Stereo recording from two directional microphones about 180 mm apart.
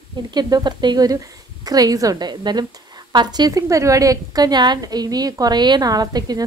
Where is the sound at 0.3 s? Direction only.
25° right (ahead or behind).